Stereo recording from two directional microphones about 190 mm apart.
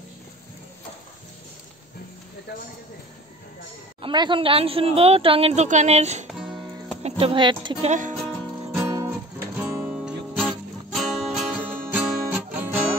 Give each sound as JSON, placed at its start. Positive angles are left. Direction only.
{"t": 4.0, "sound": "a woman's voice", "side_deg": -25}
{"t": 8.7, "sound": "guitar", "side_deg": -15}
{"t": 9.6, "sound": "music", "side_deg": -5}
{"t": 11.0, "sound": "guitar", "side_deg": 0}